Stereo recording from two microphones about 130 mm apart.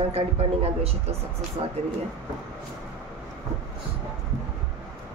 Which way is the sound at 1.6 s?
40° right (ahead or behind).